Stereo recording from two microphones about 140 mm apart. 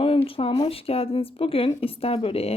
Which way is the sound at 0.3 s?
40° left (ahead or behind).